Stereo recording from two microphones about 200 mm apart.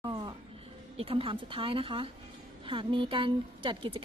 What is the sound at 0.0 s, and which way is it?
Music, 20° right (ahead or behind).